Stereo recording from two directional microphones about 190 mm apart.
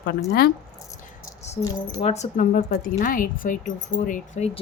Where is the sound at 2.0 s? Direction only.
35° left (ahead or behind).